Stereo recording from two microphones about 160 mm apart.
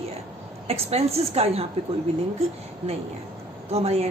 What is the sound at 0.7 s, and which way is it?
Speech, 40° right (ahead or behind).